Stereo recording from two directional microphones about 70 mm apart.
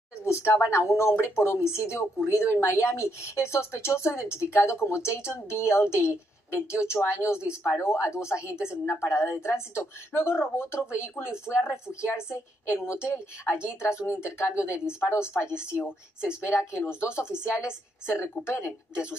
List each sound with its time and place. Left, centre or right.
0.2 s speech: left
11.6 s speech: centre
12.1 s speech: left
16.4 s speech: left